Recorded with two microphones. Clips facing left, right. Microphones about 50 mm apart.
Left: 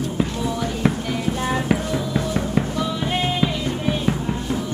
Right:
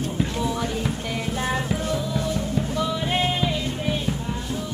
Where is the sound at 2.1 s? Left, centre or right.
Left.